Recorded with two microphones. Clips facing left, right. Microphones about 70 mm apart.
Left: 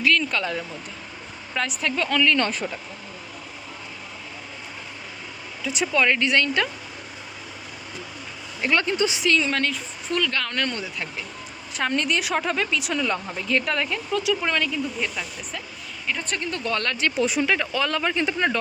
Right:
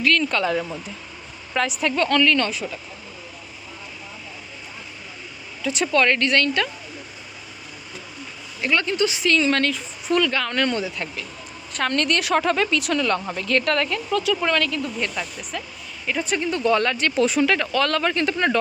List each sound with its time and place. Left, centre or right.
0.2 s speech: centre
1.8 s speech: centre
2.6 s speech: left
5.6 s speech: centre
8.6 s a woman's voice: left
9.4 s speech: centre
11.8 s speech: centre
17.2 s speech: centre